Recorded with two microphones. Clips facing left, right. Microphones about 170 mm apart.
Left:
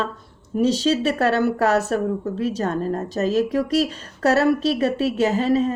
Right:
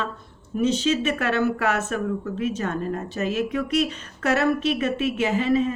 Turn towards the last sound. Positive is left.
turn(degrees=40)  # may be behind; listen again after turning